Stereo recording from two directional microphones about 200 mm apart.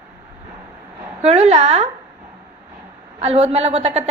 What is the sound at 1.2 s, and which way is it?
Speech, 30° right (ahead or behind).